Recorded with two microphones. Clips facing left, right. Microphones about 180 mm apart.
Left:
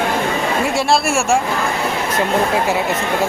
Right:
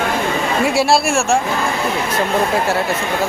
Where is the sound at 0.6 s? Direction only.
5° right (ahead or behind).